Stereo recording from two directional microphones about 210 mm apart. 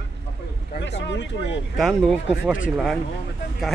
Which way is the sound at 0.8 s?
55° left (ahead or behind).